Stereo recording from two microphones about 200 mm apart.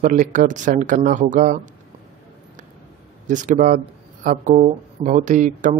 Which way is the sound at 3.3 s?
40° right (ahead or behind).